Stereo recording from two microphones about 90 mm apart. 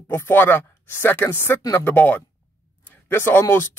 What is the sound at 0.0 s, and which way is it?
Speech, 25° left (ahead or behind).